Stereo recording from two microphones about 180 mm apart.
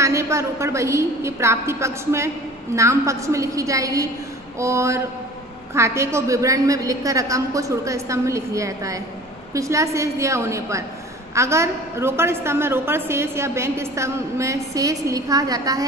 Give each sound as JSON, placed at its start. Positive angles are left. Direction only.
{"t": 0.0, "sound": "a woman's voice", "side_deg": -15}